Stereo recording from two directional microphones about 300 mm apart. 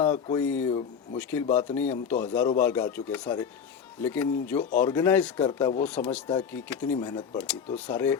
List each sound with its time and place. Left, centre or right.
0.0 s speech: centre